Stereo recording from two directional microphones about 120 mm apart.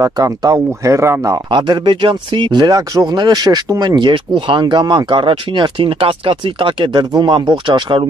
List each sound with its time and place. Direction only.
0.0 s speech: 30° right (ahead or behind)
1.5 s speech: 40° right (ahead or behind)